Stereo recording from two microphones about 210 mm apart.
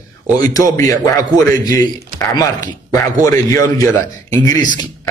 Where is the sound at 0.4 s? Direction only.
15° left (ahead or behind).